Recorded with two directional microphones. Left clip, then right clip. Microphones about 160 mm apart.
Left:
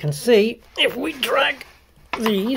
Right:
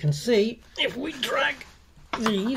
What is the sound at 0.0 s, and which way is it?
Speech, 40° left (ahead or behind).